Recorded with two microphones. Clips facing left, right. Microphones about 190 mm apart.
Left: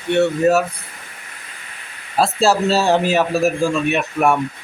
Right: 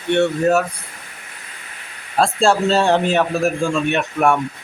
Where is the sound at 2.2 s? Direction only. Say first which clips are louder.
Even; 5° left (ahead or behind).